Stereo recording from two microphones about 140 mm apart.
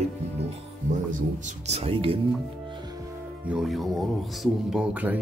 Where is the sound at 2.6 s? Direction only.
35° right (ahead or behind).